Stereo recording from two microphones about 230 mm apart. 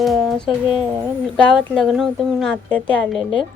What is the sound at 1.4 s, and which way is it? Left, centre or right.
A woman's voice, centre.